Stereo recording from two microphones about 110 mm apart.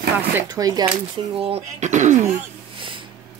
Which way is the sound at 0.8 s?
55° right (ahead or behind).